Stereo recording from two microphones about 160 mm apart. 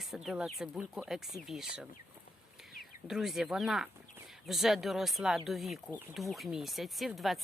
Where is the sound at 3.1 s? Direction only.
Centre (ahead or behind).